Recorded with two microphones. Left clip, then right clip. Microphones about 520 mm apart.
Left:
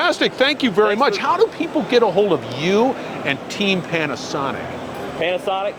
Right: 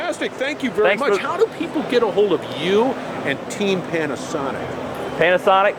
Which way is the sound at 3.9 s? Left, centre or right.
Left.